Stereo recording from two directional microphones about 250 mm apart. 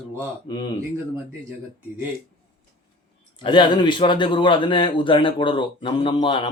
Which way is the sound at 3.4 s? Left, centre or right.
Centre.